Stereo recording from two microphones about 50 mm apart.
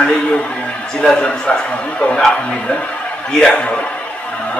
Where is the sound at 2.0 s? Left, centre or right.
Centre.